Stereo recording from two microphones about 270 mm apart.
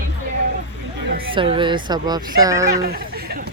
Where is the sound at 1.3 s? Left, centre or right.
Centre.